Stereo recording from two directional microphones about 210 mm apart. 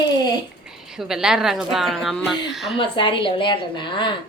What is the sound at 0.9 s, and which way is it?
A woman's voice, 5° right (ahead or behind).